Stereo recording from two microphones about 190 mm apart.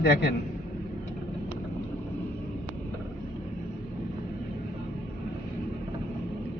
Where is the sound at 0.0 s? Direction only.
60° left (ahead or behind).